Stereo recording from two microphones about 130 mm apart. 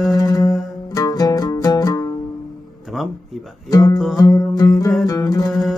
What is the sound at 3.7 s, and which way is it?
Music, 30° left (ahead or behind).